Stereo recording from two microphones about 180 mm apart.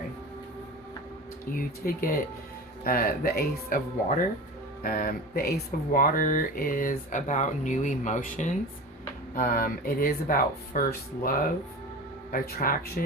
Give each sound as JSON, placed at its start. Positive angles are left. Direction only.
{"t": 1.5, "sound": "speech", "side_deg": 55}
{"t": 4.8, "sound": "speech", "side_deg": 55}
{"t": 9.3, "sound": "speech", "side_deg": 55}